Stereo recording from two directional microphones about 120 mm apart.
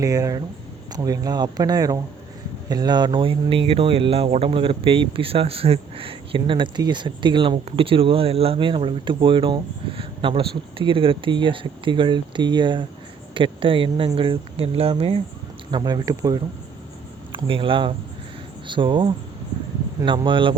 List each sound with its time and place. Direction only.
0.0 s speech: 30° right (ahead or behind); by 15.2 s 50° right (ahead or behind)
15.7 s speech: 35° right (ahead or behind)
17.3 s speech: 45° right (ahead or behind)
20.1 s speech: 45° right (ahead or behind)